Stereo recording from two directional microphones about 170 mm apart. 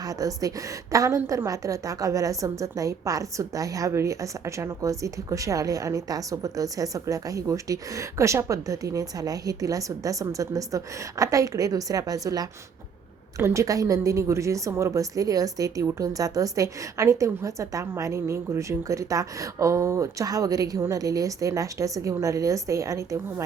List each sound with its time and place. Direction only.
0.2 s a woman's voice: 20° right (ahead or behind)